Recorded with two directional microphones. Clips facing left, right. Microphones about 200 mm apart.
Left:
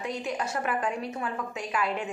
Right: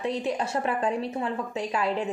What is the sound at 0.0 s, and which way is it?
A woman's voice, 30° right (ahead or behind).